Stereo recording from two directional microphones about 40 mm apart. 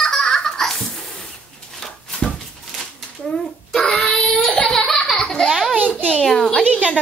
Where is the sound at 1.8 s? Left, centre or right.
Centre.